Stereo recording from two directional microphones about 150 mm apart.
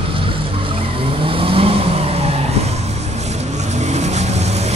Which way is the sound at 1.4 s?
40° right (ahead or behind).